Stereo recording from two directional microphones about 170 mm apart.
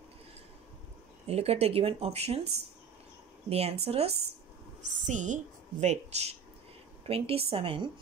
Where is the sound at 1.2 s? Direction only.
35° right (ahead or behind).